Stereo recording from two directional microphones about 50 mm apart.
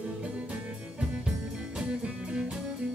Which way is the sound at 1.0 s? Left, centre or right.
Centre.